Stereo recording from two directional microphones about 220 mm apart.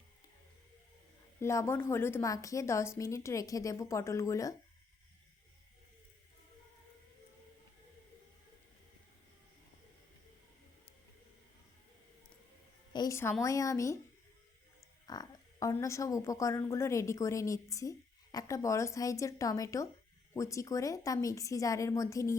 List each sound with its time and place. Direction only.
1.4 s speech: 10° left (ahead or behind)
12.9 s a woman's voice: 15° left (ahead or behind)
15.0 s speech: 20° left (ahead or behind)